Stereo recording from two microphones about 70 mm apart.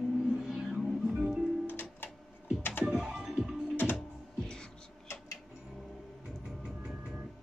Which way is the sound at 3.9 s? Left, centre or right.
Centre.